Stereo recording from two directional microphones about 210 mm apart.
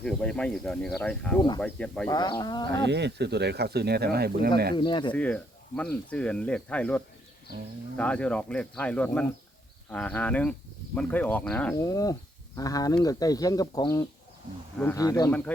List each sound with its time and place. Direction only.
0.0 s speech: 5° left (ahead or behind)
1.4 s speech: 20° left (ahead or behind)
1.6 s speech: 5° left (ahead or behind)
2.0 s speech: 20° left (ahead or behind)
2.8 s speech: 55° right (ahead or behind)
4.7 s speech: 20° left (ahead or behind)
5.1 s speech: 5° left (ahead or behind)